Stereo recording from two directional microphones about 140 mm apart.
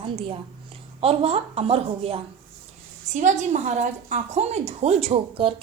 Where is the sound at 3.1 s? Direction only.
60° right (ahead or behind).